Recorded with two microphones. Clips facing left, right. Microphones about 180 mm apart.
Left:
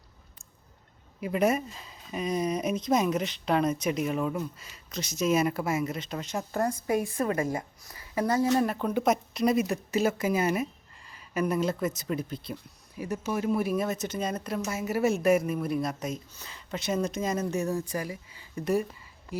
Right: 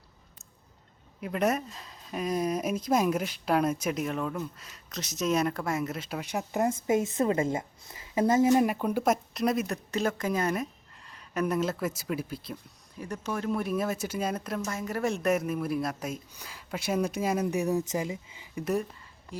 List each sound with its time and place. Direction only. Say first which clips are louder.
1.2 s a woman's voice: left 2 dB; centre (ahead or behind)
13.0 s speech: left 3 dB; 5° left (ahead or behind); by 18.4 s 20° right (ahead or behind)
18.5 s speech: left 2 dB; centre (ahead or behind)